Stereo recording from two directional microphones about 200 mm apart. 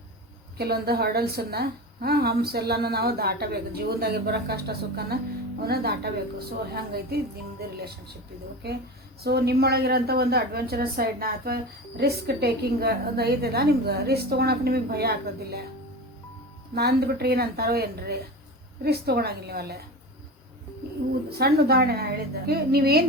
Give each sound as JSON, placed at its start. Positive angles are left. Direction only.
{"t": 0.5, "sound": "a woman's voice", "side_deg": -50}
{"t": 8.6, "sound": "a woman's voice", "side_deg": -50}
{"t": 16.7, "sound": "a woman's voice", "side_deg": -50}
{"t": 21.2, "sound": "a woman's voice", "side_deg": -50}